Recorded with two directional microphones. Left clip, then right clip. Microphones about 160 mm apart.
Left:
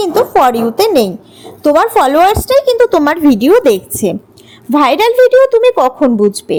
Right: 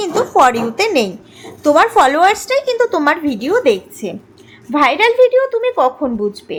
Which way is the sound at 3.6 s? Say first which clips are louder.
Left 4 dB; 70° left (ahead or behind).